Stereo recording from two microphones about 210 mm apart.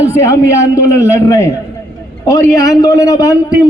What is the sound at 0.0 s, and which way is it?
A man's voice, 15° left (ahead or behind).